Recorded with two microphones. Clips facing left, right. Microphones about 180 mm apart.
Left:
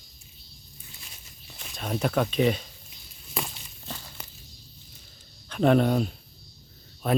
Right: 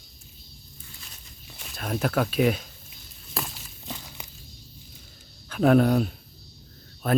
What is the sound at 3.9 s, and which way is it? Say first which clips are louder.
Walk: right 2 dB; 15° right (ahead or behind).